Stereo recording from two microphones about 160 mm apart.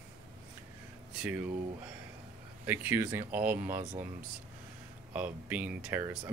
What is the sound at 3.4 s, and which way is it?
Speech, 55° right (ahead or behind).